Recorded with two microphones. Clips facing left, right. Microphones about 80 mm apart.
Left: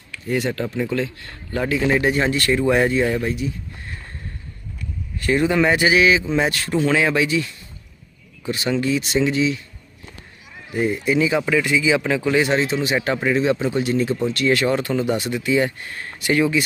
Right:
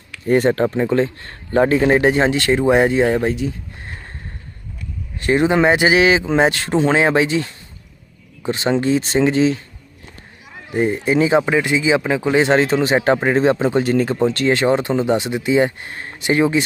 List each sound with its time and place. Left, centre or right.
0.3 s speech: right
5.2 s speech: right
10.7 s speech: right
12.5 s speech: right